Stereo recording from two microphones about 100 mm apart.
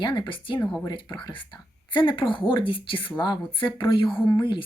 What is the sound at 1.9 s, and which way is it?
Speech, 55° left (ahead or behind).